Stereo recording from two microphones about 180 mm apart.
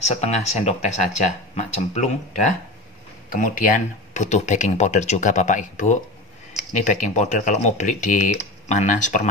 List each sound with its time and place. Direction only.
0.0 s speech: 35° left (ahead or behind)